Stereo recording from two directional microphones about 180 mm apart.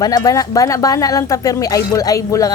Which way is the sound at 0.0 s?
20° left (ahead or behind).